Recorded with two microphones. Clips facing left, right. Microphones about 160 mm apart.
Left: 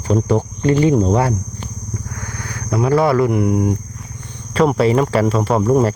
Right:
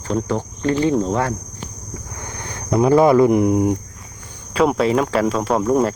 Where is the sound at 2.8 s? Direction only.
15° right (ahead or behind).